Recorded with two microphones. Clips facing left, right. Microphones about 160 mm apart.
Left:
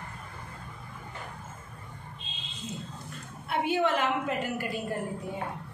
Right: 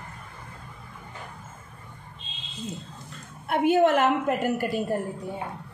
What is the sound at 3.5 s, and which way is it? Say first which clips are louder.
A woman's voice: right 7 dB; 50° right (ahead or behind).